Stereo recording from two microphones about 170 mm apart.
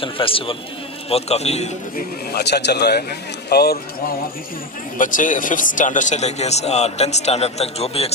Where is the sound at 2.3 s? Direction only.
75° left (ahead or behind).